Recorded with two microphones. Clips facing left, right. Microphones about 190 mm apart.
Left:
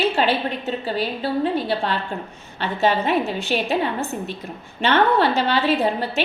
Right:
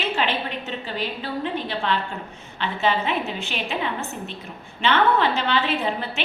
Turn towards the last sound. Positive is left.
turn(degrees=40)  # may be behind; listen again after turning